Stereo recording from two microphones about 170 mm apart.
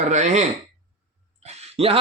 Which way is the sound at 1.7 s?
35° right (ahead or behind).